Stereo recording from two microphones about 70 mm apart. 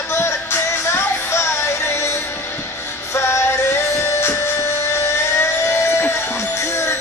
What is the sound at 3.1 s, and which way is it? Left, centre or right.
Music, left.